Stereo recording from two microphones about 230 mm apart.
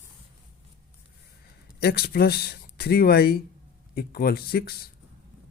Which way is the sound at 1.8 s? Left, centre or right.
Left.